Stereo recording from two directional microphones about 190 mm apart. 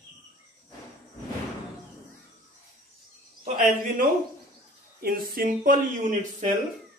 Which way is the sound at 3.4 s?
40° right (ahead or behind).